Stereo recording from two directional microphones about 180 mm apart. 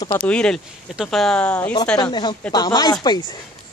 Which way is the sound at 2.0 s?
25° left (ahead or behind).